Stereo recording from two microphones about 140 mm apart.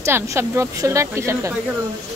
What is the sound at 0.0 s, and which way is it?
Speech, 20° right (ahead or behind).